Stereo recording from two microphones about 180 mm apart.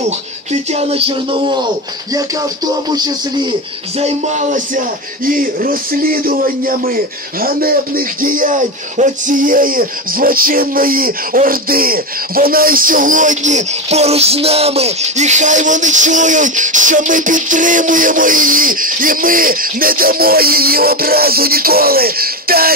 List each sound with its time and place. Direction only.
0.5 s speech: 35° right (ahead or behind)
2.1 s music: 20° right (ahead or behind)
4.0 s speech: 40° right (ahead or behind); by 22.7 s 55° right (ahead or behind)